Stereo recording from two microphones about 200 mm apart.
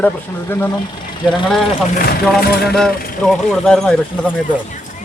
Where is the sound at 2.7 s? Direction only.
Centre (ahead or behind).